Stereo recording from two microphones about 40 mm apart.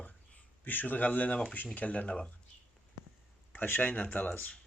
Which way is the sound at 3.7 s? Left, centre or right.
Left.